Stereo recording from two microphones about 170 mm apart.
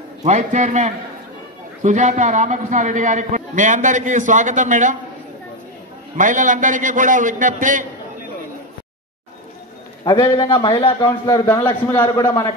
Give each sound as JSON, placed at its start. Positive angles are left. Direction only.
{"t": 0.2, "sound": "a man's voice", "side_deg": -45}
{"t": 6.1, "sound": "a man's voice", "side_deg": -50}
{"t": 10.0, "sound": "a man's voice", "side_deg": 20}
{"t": 11.1, "sound": "a man's voice", "side_deg": 15}